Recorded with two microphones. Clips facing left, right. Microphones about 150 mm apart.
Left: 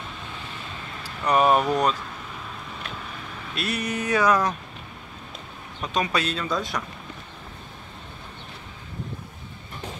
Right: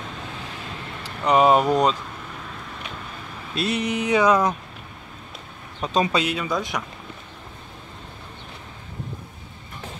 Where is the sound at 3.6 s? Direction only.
25° right (ahead or behind).